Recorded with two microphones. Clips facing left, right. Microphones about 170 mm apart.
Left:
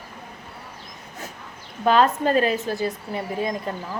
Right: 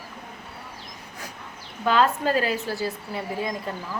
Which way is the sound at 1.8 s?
25° left (ahead or behind).